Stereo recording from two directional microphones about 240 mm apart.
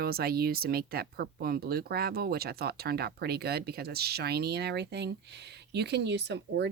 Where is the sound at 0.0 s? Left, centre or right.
Right.